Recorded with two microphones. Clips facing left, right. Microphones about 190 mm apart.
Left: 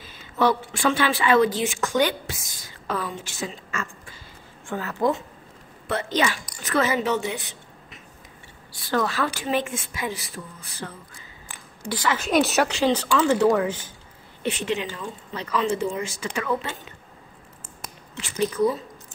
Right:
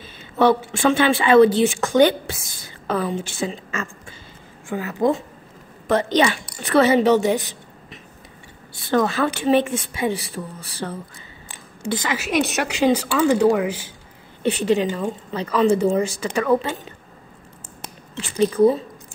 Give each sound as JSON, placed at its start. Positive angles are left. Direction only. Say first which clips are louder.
{"t": 0.0, "sound": "a woman's voice", "louder": "right 5 dB", "side_deg": -25}
{"t": 5.9, "sound": "a woman's voice", "louder": "right 6 dB", "side_deg": -35}
{"t": 8.7, "sound": "a woman's voice", "louder": "right 5 dB", "side_deg": -25}
{"t": 11.8, "sound": "a woman's voice", "louder": "right 2 dB", "side_deg": -20}
{"t": 12.2, "sound": "speech", "louder": "left 3 dB", "side_deg": 0}
{"t": 12.6, "sound": "speech", "louder": "right 3 dB", "side_deg": -15}
{"t": 14.5, "sound": "a woman's voice", "louder": "right 8 dB", "side_deg": -35}